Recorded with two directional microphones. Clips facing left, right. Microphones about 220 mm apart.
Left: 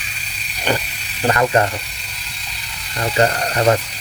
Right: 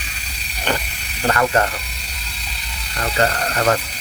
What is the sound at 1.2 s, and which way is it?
Speech, 20° left (ahead or behind).